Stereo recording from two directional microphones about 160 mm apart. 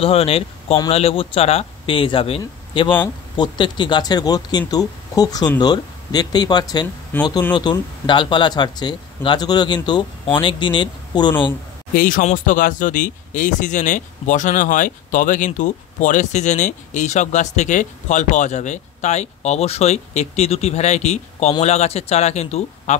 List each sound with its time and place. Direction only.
0.0 s speech: 35° left (ahead or behind)
7.1 s speech: 10° left (ahead or behind)
7.5 s speech: 30° left (ahead or behind)
11.9 s speech: 60° left (ahead or behind); by 22.9 s 45° left (ahead or behind)